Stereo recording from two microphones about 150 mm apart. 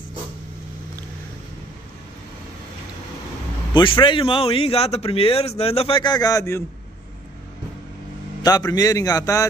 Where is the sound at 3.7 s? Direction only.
35° left (ahead or behind).